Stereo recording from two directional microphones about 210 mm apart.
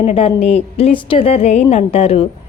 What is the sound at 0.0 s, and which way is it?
A woman's voice, 25° left (ahead or behind).